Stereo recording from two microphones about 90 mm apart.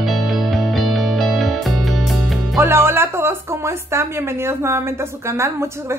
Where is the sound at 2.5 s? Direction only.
25° right (ahead or behind).